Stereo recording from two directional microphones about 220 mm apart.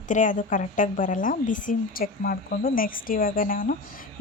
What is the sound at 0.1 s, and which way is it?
Speech, 35° left (ahead or behind).